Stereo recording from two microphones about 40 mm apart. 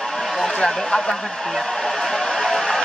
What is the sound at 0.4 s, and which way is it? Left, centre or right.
Speech, centre.